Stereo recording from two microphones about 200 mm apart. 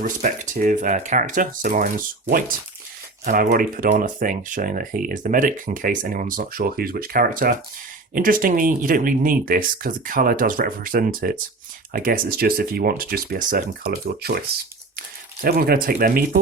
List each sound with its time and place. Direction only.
0.0 s speech: 40° right (ahead or behind)
3.2 s speech: 50° right (ahead or behind)